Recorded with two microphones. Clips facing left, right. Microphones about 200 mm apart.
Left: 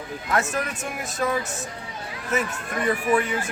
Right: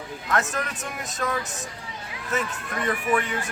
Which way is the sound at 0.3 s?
Centre (ahead or behind).